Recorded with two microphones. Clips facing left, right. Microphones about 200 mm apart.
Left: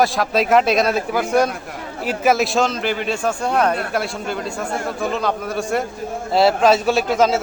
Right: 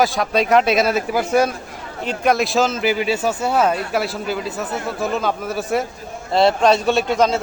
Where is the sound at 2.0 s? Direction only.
5° left (ahead or behind).